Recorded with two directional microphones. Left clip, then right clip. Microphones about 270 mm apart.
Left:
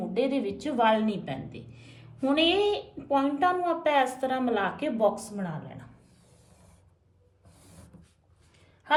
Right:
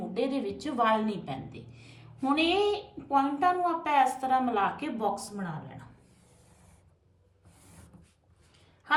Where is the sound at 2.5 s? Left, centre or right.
Centre.